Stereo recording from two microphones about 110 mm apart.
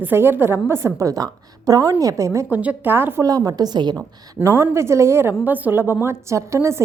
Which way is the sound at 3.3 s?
35° right (ahead or behind).